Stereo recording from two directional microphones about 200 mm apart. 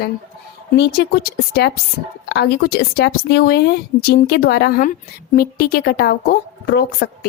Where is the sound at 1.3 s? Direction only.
55° left (ahead or behind).